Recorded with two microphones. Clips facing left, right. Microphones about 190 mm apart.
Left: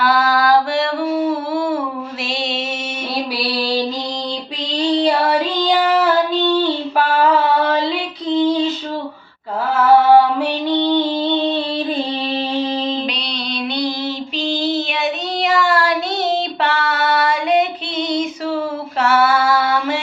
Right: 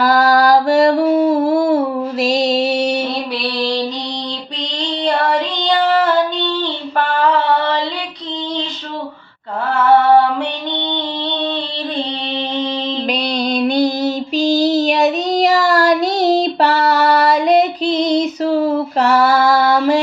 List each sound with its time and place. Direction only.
0.0 s a sound: 40° right (ahead or behind)
2.2 s mantra: 40° right (ahead or behind)
3.6 s mantra: 5° left (ahead or behind)
5.0 s child singing: 5° left (ahead or behind)
6.3 s female singing: 5° left (ahead or behind)
13.1 s music: 45° right (ahead or behind)